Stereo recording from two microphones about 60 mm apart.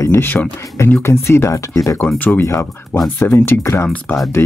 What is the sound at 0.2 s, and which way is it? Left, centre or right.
Speech, left.